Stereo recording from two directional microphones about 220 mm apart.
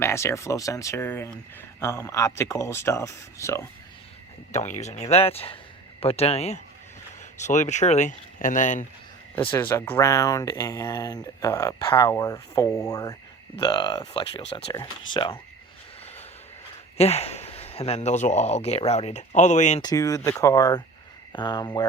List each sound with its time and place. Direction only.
0.0 s speech: 10° left (ahead or behind)
4.5 s speech: 30° left (ahead or behind)
9.5 s speech: 10° left (ahead or behind)
17.0 s speech: 30° left (ahead or behind)
19.8 s speech: 15° left (ahead or behind)